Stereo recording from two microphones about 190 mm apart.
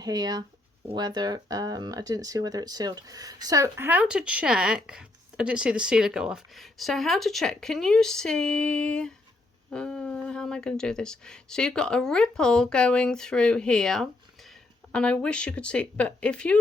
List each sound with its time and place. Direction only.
0.0 s speech: 20° right (ahead or behind); by 16.6 s 5° left (ahead or behind)